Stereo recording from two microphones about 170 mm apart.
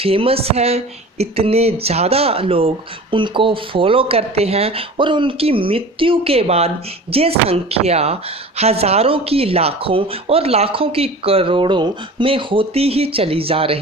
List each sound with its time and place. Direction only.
0.0 s speech: 35° right (ahead or behind)